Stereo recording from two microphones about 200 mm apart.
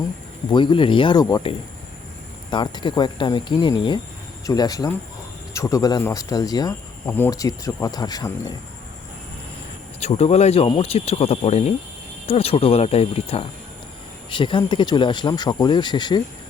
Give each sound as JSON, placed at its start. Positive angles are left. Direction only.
{"t": 0.5, "sound": "speech", "side_deg": 25}
{"t": 10.0, "sound": "speech", "side_deg": 35}